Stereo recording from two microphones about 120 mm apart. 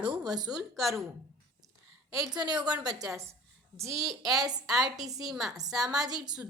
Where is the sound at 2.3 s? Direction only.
35° right (ahead or behind).